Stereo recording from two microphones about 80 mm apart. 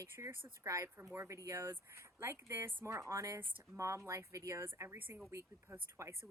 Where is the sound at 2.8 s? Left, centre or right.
Right.